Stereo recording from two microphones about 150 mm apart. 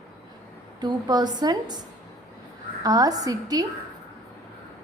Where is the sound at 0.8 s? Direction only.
30° right (ahead or behind).